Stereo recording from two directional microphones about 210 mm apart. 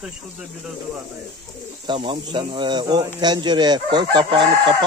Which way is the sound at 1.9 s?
20° right (ahead or behind).